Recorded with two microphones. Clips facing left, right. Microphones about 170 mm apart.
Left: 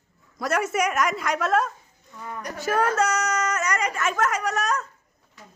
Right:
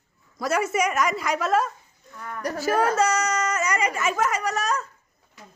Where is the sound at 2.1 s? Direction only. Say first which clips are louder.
Even; 10° left (ahead or behind).